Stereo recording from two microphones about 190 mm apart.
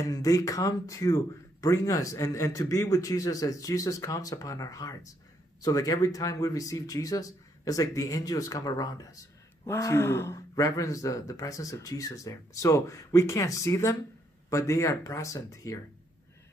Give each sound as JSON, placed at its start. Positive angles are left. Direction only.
{"t": 0.0, "sound": "speech", "side_deg": 20}